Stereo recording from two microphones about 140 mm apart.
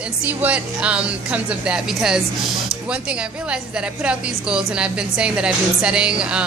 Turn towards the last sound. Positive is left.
turn(degrees=-5)  # may be behind; listen again after turning